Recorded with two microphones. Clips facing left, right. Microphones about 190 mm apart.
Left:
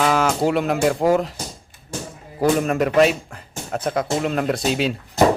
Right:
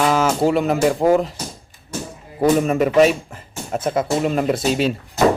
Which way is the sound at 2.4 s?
Centre (ahead or behind).